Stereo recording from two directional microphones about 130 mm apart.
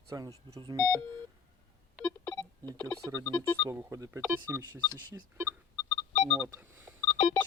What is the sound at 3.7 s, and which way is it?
Speech, 20° right (ahead or behind).